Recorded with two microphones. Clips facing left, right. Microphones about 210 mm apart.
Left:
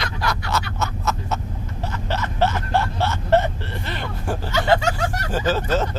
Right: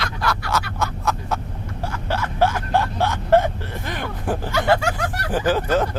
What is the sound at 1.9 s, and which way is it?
Vehicle, 10° right (ahead or behind).